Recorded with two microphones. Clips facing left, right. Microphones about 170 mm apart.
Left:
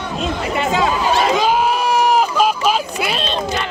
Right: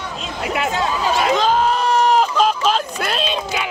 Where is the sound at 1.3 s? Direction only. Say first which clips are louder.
Left 1 dB; 10° left (ahead or behind).